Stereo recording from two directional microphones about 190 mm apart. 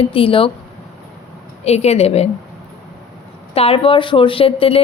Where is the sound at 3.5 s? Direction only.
30° left (ahead or behind).